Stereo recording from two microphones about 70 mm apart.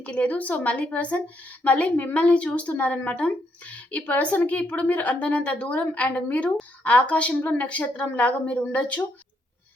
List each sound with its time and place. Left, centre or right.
0.0 s a woman's voice: left